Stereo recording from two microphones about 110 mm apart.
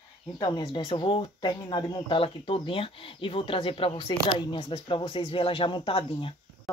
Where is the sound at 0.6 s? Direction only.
50° left (ahead or behind).